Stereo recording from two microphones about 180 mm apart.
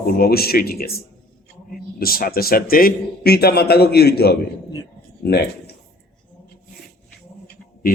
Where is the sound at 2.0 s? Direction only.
55° left (ahead or behind).